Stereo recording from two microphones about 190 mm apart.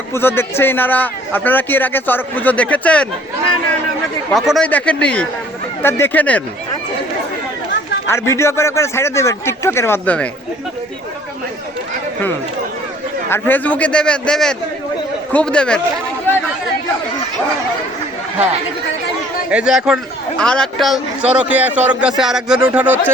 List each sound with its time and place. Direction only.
0.1 s a man's voice: 10° left (ahead or behind)
4.3 s a man's voice: centre (ahead or behind)
8.0 s a man's voice: 15° left (ahead or behind)
13.3 s a man's voice: 10° left (ahead or behind)
19.5 s a man's voice: 5° right (ahead or behind)